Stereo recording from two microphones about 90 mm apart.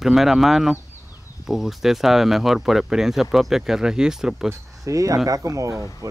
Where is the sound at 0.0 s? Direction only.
5° right (ahead or behind).